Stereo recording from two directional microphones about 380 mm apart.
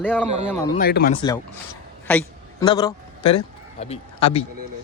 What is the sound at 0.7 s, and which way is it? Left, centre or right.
Speech, left.